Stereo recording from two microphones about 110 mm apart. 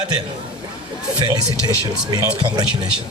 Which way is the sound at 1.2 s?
40° right (ahead or behind).